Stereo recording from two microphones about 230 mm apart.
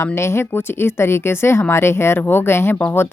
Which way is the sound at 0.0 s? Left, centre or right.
Centre.